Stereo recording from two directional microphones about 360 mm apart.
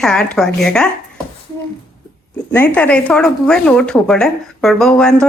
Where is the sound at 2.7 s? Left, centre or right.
Centre.